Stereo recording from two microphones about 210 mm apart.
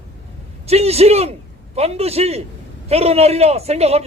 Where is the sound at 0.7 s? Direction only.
30° right (ahead or behind).